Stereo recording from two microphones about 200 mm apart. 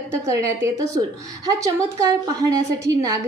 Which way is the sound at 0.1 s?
15° right (ahead or behind).